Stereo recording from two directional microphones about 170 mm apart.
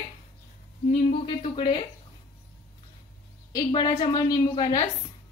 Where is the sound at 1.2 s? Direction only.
30° left (ahead or behind).